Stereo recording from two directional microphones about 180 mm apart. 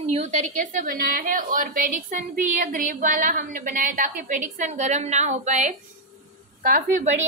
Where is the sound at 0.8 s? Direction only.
55° right (ahead or behind).